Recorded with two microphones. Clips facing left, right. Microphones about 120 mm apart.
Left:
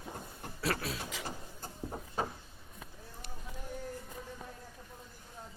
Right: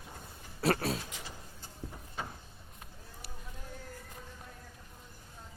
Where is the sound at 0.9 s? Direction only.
55° left (ahead or behind).